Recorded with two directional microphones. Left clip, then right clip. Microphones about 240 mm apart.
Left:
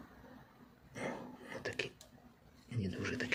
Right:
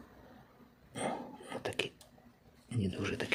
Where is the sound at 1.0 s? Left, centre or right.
Centre.